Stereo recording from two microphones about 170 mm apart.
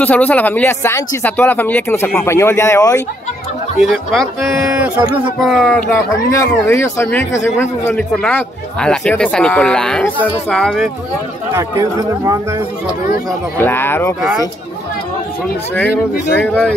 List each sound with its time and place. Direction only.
0.0 s speech: 10° left (ahead or behind)
3.9 s speech: centre (ahead or behind)
11.5 s speech: 20° right (ahead or behind)
13.6 s speech: 10° left (ahead or behind)
15.7 s speech: 10° left (ahead or behind)